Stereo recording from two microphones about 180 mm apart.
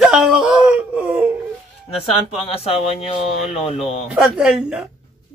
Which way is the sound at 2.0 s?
35° left (ahead or behind).